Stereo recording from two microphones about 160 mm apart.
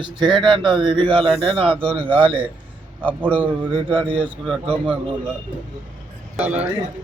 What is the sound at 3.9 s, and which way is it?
A man's voice, 30° right (ahead or behind).